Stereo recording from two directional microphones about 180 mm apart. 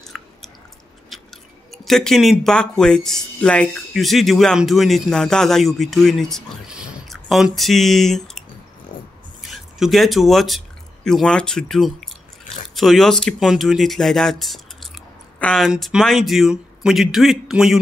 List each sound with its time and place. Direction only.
0.0 s chewing: centre (ahead or behind)
1.1 s speech: centre (ahead or behind)